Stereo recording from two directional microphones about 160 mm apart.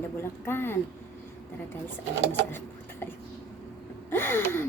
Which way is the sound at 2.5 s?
15° left (ahead or behind).